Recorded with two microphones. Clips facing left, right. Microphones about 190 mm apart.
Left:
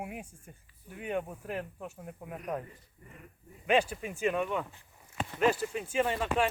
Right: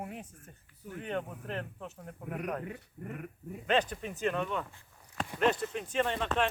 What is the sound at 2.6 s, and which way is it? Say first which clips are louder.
Speech: right 8 dB; 75° right (ahead or behind).